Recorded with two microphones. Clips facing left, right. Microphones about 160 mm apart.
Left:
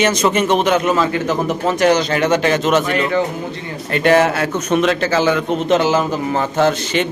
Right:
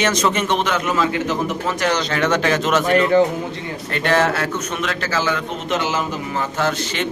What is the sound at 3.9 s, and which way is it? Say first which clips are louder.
A man's voice: left 5 dB; 15° left (ahead or behind).